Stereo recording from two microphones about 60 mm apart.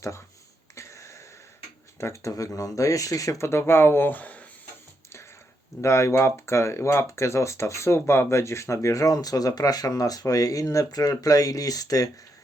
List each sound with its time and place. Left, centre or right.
0.8 s wheeze: left
2.0 s speech: left
5.8 s speech: left